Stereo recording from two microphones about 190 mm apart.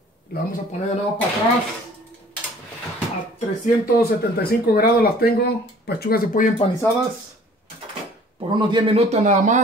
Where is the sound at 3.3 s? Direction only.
45° left (ahead or behind).